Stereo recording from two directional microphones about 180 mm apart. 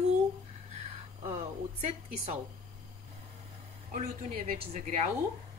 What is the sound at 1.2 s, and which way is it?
Speech, 35° right (ahead or behind).